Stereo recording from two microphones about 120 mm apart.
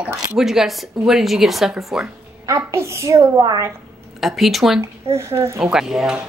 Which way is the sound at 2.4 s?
25° right (ahead or behind).